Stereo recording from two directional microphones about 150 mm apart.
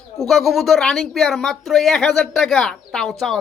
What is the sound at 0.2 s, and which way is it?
Speech, centre (ahead or behind).